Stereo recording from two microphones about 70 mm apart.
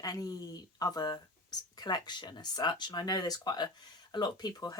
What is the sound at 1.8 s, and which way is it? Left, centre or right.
Speech, left.